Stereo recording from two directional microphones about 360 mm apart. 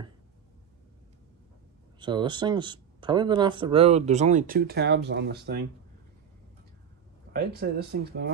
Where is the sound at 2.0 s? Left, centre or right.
Centre.